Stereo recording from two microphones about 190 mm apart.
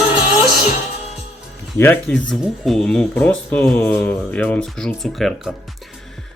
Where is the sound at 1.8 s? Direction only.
10° left (ahead or behind).